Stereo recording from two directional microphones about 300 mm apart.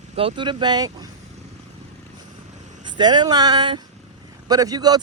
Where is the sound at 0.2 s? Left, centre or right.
Centre.